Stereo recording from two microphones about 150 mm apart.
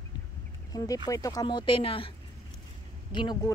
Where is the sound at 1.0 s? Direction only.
25° left (ahead or behind).